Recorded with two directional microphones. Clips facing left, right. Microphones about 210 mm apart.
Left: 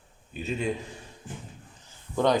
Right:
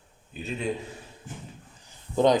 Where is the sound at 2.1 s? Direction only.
20° right (ahead or behind).